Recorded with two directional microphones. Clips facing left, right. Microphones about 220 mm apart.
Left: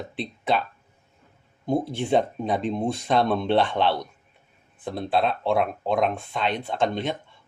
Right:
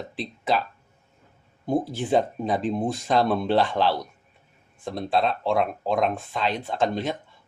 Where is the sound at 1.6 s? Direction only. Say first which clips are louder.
Even; centre (ahead or behind).